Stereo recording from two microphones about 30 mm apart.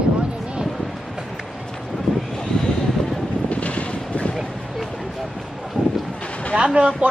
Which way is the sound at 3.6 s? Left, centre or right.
Left.